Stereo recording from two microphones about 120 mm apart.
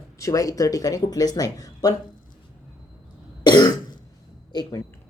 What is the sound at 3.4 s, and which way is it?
Cough, 35° left (ahead or behind).